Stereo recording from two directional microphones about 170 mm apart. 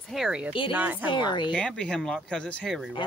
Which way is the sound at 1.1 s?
25° left (ahead or behind).